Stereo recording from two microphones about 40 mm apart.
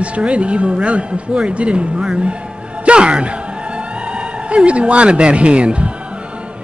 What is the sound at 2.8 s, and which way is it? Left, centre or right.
Music, right.